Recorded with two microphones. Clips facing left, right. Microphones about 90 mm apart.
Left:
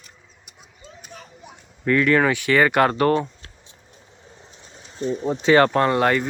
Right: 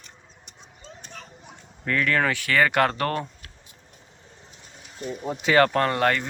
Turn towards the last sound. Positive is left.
turn(degrees=20)  # may be behind; listen again after turning